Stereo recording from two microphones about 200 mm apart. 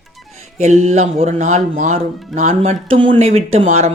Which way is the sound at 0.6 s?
35° right (ahead or behind).